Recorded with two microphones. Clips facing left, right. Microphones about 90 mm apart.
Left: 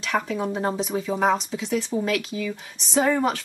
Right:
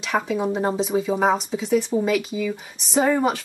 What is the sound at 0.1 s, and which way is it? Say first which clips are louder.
Speech: right 3 dB; 5° right (ahead or behind).